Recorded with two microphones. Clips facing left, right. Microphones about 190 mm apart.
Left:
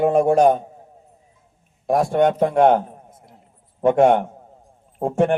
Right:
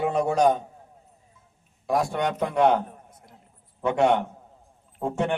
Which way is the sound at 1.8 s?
50° left (ahead or behind).